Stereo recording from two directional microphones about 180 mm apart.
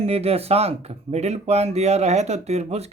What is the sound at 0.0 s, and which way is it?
Speech, 35° right (ahead or behind).